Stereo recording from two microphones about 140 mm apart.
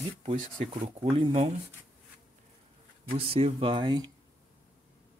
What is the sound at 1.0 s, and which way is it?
Speech, 40° right (ahead or behind).